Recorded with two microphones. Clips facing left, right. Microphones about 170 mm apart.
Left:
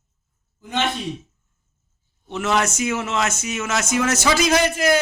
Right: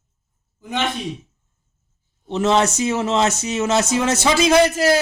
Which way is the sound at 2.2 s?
35° right (ahead or behind).